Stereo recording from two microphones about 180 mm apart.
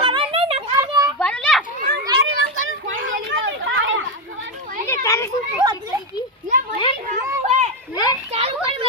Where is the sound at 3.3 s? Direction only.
90° right.